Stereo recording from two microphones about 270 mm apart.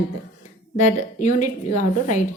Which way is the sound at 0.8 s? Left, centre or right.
Left.